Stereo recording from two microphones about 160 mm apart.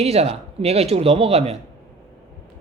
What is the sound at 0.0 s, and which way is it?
Speech, 40° right (ahead or behind).